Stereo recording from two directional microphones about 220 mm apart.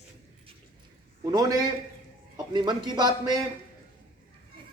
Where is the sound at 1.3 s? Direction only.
15° right (ahead or behind).